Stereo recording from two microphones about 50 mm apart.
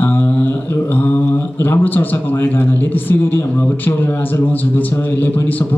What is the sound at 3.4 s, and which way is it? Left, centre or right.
Speech, left.